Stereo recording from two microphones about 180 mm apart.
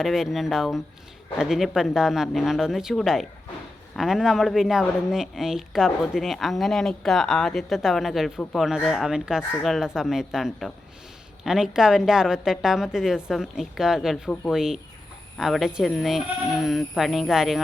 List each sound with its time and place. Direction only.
0.0 s speech: centre (ahead or behind)